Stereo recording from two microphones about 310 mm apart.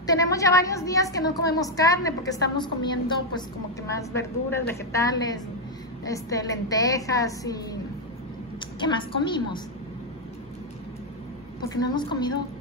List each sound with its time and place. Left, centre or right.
0.0 s a woman's voice: centre
8.5 s a woman's voice: centre
11.7 s a woman's voice: centre